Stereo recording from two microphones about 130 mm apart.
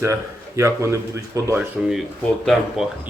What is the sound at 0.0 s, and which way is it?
Speech, 20° right (ahead or behind).